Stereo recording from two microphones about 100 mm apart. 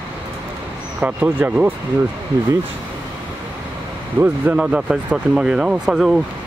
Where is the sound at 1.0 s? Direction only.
15° right (ahead or behind).